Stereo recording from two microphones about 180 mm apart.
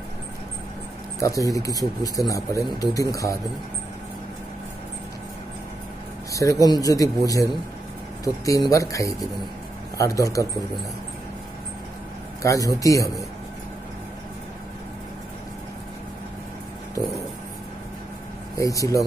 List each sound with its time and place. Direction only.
1.2 s a man's voice: 20° left (ahead or behind)
6.3 s speech: 20° left (ahead or behind)
12.4 s a man's voice: 20° left (ahead or behind)
18.6 s a man's voice: 20° left (ahead or behind)